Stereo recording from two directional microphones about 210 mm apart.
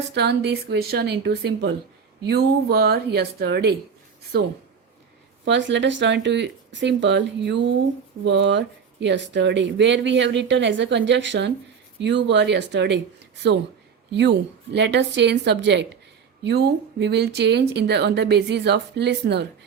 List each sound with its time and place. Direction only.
0.1 s a woman's voice: 50° right (ahead or behind)
5.5 s speech: 60° right (ahead or behind)
14.1 s a woman's voice: 55° right (ahead or behind)